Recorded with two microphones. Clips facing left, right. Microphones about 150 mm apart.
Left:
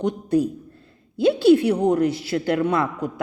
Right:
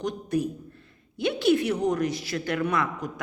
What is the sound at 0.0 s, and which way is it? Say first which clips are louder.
A woman's voice: left 6 dB; 25° left (ahead or behind).